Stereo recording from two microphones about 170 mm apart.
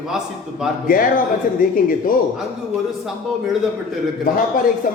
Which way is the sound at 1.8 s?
55° left (ahead or behind).